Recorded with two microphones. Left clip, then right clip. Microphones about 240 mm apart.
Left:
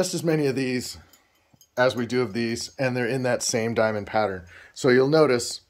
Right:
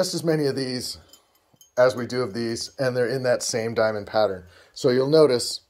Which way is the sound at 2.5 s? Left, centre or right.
Left.